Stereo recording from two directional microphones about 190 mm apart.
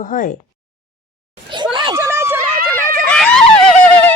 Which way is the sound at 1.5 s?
25° right (ahead or behind).